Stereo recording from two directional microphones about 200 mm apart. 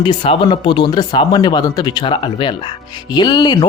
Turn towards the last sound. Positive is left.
turn(degrees=20)  # may be behind; listen again after turning